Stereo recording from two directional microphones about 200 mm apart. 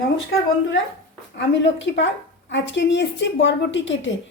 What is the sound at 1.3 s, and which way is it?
Speech, 65° left (ahead or behind).